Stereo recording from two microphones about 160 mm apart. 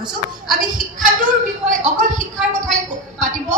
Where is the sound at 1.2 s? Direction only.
55° right (ahead or behind).